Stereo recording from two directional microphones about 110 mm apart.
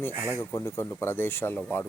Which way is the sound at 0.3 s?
25° left (ahead or behind).